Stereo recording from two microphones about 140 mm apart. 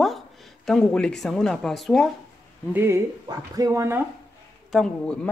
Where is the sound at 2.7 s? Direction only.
15° right (ahead or behind).